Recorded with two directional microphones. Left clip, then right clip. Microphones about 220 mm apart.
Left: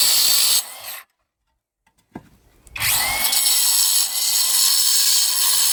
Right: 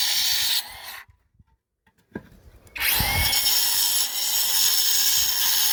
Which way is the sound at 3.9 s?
55° left (ahead or behind).